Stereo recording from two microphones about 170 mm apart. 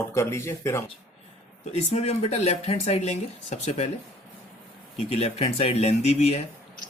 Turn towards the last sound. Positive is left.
turn(degrees=40)  # may be behind; listen again after turning